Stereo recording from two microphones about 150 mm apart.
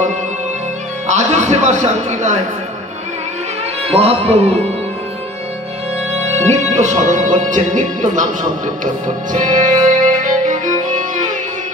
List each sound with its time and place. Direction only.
1.0 s speech: 55° right (ahead or behind)
3.8 s a man's voice: 40° right (ahead or behind)
6.1 s music: 45° right (ahead or behind)
9.3 s music: 60° right (ahead or behind)